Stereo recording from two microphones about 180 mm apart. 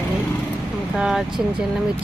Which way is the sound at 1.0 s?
Centre (ahead or behind).